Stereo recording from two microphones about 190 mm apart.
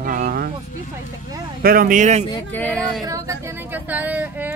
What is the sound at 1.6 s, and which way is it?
Speech, 50° right (ahead or behind).